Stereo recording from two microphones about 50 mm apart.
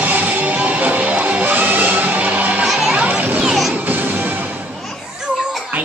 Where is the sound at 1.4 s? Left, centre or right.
Right.